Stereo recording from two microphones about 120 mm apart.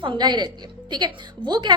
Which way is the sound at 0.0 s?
40° right (ahead or behind).